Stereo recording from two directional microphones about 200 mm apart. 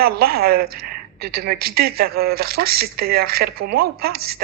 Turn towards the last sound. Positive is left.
turn(degrees=-50)  # may be behind; listen again after turning